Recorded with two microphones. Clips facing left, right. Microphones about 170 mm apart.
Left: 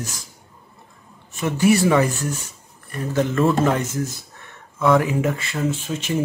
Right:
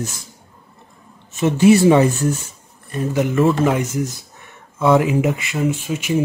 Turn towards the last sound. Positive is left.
turn(degrees=-10)  # may be behind; listen again after turning